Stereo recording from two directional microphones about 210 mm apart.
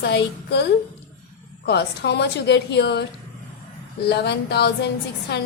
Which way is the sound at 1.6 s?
50° left (ahead or behind).